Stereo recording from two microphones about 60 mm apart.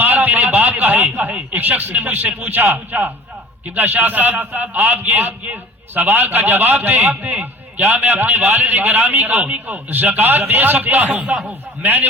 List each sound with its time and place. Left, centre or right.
0.0 s a sound: right
1.1 s speech: right
3.8 s a man's voice: right
11.2 s a man's voice: centre
11.8 s a man's voice: right